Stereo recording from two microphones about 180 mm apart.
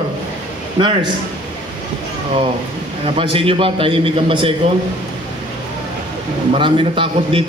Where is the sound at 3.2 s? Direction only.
30° right (ahead or behind).